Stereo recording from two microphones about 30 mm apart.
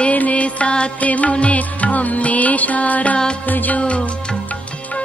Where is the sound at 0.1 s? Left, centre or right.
Left.